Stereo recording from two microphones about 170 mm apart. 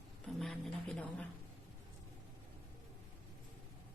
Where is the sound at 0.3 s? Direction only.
Centre (ahead or behind).